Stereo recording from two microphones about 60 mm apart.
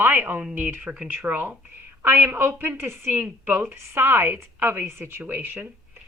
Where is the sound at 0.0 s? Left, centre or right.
Right.